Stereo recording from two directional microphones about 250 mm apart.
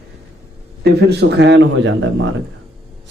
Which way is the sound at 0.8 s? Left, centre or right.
Right.